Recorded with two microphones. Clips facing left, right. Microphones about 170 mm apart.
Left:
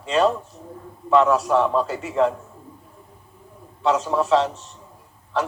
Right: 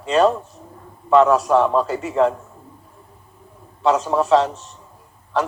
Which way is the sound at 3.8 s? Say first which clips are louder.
Right 3 dB; 45° right (ahead or behind).